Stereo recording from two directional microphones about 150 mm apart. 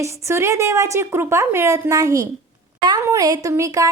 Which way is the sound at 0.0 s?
20° right (ahead or behind).